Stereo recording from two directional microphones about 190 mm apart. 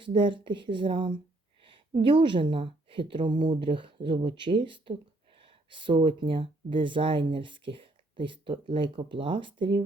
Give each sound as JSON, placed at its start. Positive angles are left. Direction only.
{"t": 0.0, "sound": "a woman's voice", "side_deg": -25}